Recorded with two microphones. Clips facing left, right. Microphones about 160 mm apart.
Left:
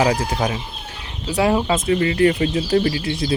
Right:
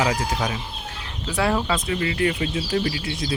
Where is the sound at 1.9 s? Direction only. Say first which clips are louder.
Left 9 dB; 40° left (ahead or behind).